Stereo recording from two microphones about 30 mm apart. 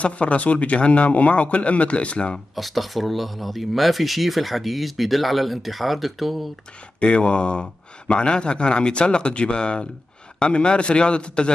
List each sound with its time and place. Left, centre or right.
0.0 s speech: left
2.5 s speech: centre
7.0 s speech: left